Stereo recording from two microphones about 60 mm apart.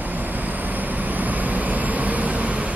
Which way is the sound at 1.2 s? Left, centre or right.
Right.